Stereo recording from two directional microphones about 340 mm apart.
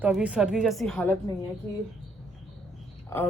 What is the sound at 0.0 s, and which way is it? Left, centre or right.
A woman's voice, centre.